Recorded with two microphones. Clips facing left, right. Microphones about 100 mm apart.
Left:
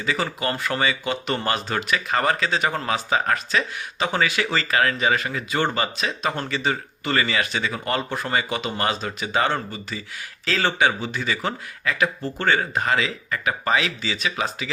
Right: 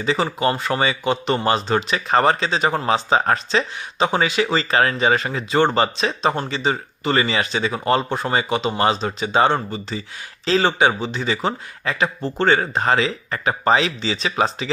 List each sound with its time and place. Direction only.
0.0 s speech: 25° right (ahead or behind)